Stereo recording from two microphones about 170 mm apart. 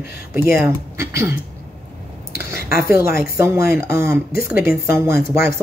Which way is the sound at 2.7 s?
60° left (ahead or behind).